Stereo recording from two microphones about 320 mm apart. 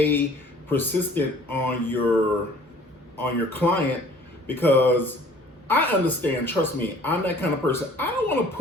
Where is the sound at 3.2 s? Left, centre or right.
Centre.